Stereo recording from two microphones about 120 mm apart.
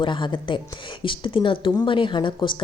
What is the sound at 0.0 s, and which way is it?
A woman's voice, 40° left (ahead or behind).